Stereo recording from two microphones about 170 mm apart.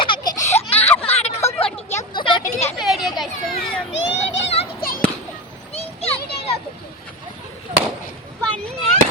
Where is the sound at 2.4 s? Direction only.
40° left (ahead or behind).